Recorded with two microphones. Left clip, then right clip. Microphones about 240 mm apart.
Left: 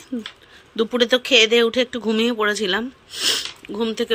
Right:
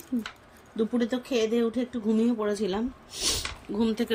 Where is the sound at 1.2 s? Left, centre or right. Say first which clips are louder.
Left 13 dB; left.